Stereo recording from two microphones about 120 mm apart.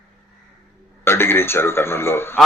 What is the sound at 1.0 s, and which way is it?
A man's voice, 20° left (ahead or behind).